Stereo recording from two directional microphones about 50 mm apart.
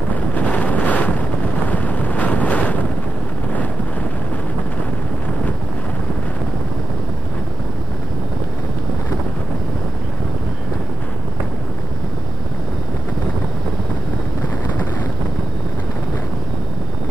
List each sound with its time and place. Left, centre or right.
0.1 s wind noise: left